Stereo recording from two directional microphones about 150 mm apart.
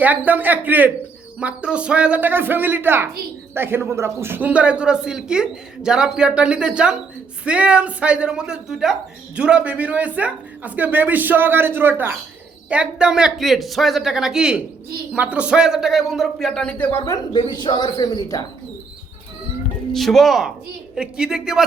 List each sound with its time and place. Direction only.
0.0 s speech: 10° right (ahead or behind); by 17.0 s 10° left (ahead or behind)
17.1 s speech: 30° left (ahead or behind)
19.9 s speech: centre (ahead or behind)